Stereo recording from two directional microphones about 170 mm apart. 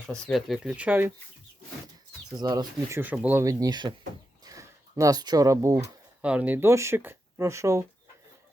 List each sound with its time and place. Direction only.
0.1 s speech: centre (ahead or behind)
2.4 s speech: 25° right (ahead or behind)
3.0 s speech: 10° right (ahead or behind)
6.2 s speech: 10° right (ahead or behind)